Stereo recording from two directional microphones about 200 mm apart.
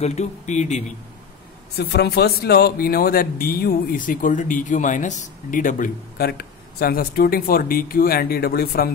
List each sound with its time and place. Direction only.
0.0 s speech: 35° left (ahead or behind)
1.8 s speech: 55° left (ahead or behind)